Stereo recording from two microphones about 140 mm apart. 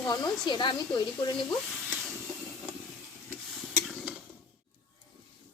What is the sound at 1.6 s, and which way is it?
Speech, 5° right (ahead or behind).